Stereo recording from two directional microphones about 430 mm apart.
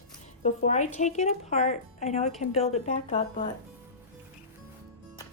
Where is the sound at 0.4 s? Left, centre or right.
Centre.